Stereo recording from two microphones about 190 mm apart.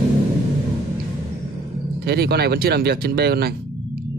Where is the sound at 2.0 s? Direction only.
55° right (ahead or behind).